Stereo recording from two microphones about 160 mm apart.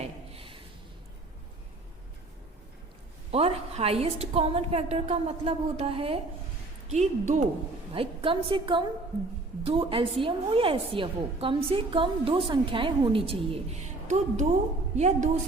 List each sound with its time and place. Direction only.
0.0 s a sound: 35° right (ahead or behind)
3.3 s a woman's voice: 40° right (ahead or behind)
6.9 s a woman's voice: 50° right (ahead or behind)
7.9 s a woman's voice: 35° right (ahead or behind)